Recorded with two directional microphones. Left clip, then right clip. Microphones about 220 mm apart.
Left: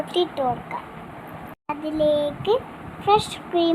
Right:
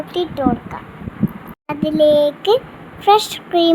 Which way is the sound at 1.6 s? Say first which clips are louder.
Right 8 dB; 15° right (ahead or behind).